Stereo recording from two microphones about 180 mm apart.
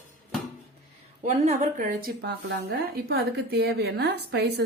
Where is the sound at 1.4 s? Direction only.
40° right (ahead or behind).